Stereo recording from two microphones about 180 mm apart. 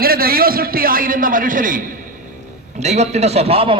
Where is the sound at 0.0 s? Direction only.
55° right (ahead or behind).